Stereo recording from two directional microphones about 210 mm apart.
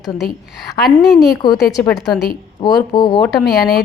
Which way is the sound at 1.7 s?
15° left (ahead or behind).